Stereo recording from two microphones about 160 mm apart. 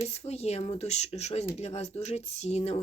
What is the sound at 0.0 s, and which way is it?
Speech, 40° left (ahead or behind).